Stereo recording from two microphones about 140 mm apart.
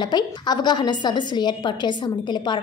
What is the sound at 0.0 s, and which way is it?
A woman's voice, 30° left (ahead or behind).